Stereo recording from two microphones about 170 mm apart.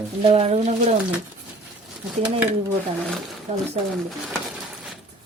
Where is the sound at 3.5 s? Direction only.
45° right (ahead or behind).